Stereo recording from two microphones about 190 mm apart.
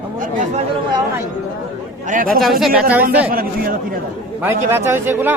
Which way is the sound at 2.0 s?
45° right (ahead or behind).